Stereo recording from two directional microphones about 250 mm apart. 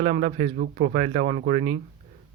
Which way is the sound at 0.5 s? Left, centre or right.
Right.